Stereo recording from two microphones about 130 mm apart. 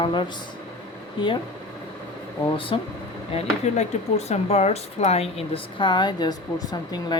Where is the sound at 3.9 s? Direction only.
60° left (ahead or behind).